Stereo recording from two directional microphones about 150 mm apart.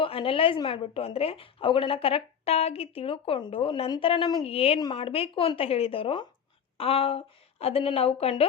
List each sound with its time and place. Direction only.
0.0 s a woman's voice: 40° left (ahead or behind)